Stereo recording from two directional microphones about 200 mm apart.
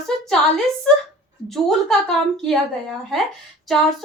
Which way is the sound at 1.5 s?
Centre (ahead or behind).